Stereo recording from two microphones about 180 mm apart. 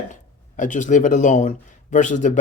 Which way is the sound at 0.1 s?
45° left (ahead or behind).